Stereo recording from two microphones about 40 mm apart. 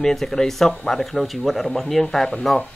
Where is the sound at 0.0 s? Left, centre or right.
Centre.